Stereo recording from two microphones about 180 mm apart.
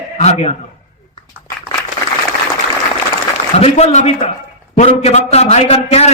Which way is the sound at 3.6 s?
35° left (ahead or behind).